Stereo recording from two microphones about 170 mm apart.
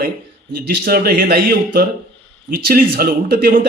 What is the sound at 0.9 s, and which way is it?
A man's voice, 65° right (ahead or behind).